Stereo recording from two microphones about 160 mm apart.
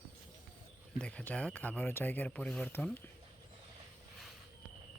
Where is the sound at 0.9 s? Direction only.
5° left (ahead or behind).